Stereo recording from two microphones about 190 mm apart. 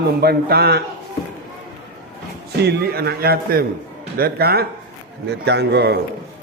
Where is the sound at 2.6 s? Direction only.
60° right (ahead or behind).